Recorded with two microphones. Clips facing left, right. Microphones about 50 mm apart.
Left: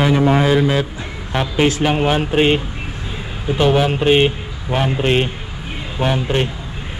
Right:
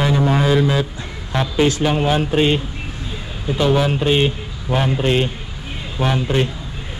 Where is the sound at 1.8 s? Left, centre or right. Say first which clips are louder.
Left 1 dB; left.